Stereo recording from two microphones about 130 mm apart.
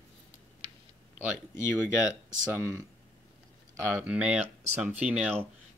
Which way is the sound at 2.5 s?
20° right (ahead or behind).